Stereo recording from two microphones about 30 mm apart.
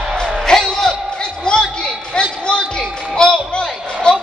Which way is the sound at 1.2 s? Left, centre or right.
Left.